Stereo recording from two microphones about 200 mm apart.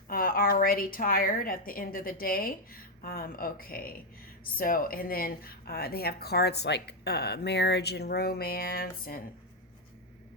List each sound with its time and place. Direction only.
0.1 s speech: 45° left (ahead or behind)